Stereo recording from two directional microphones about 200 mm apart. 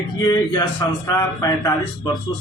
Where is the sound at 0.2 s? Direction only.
20° left (ahead or behind).